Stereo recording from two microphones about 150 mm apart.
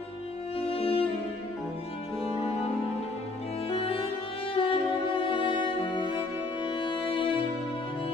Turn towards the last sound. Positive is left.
turn(degrees=35)  # may be behind; listen again after turning